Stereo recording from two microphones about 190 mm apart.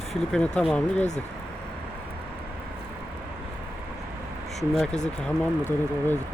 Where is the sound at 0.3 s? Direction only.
5° left (ahead or behind).